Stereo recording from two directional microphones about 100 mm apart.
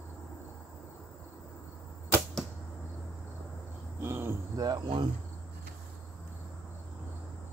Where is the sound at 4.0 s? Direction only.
25° right (ahead or behind).